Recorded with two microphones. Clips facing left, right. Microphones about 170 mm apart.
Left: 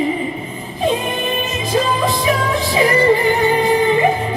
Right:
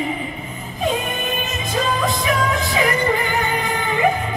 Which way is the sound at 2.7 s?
35° left (ahead or behind).